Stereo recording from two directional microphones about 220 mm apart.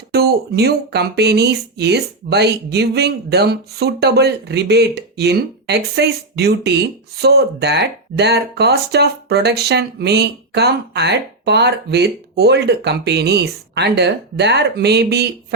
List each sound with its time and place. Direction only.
0.1 s speech: 45° right (ahead or behind)